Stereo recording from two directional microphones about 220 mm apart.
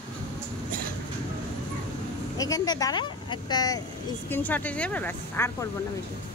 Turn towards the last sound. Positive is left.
turn(degrees=10)  # may be behind; listen again after turning